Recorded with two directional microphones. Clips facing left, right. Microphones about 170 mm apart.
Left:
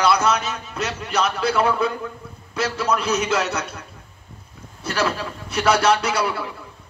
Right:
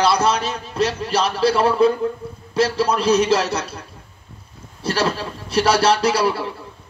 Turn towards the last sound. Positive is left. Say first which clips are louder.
# right 5 dB
turn(degrees=-30)  # may be behind; listen again after turning